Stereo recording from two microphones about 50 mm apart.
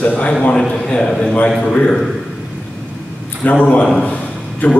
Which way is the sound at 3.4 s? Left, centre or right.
Left.